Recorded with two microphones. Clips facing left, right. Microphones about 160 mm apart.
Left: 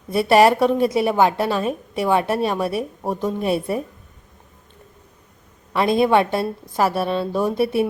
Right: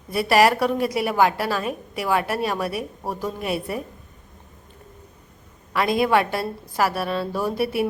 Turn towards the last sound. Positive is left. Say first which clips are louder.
# left 4 dB
turn(degrees=25)  # may be behind; listen again after turning